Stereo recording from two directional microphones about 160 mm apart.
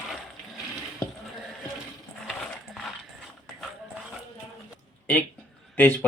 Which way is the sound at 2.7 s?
Centre (ahead or behind).